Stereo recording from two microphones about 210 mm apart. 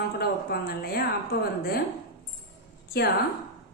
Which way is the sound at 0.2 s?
45° left (ahead or behind).